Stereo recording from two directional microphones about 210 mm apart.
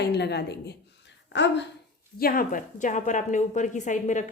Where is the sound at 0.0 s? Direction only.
50° left (ahead or behind).